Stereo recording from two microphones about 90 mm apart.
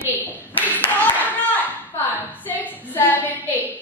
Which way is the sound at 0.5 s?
20° left (ahead or behind).